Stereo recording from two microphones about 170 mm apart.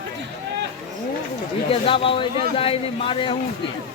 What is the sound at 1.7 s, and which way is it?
A man's voice, 30° left (ahead or behind).